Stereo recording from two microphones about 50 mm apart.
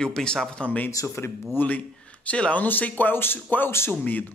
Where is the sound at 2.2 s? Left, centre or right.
Left.